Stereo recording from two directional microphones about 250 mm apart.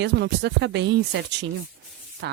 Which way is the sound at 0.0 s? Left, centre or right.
Right.